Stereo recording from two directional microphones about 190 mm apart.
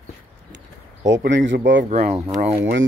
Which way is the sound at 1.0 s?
70° right (ahead or behind).